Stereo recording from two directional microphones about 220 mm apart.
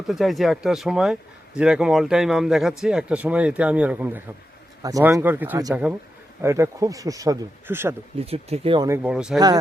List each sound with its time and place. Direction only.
0.1 s speech: centre (ahead or behind)
8.2 s speech: 25° right (ahead or behind)
9.0 s speech: 5° right (ahead or behind)